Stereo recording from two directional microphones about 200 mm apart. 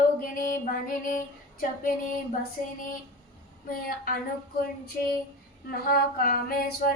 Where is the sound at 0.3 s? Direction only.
45° left (ahead or behind).